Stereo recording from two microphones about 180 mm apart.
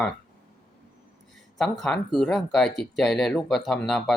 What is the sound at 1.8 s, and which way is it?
Speech, centre (ahead or behind).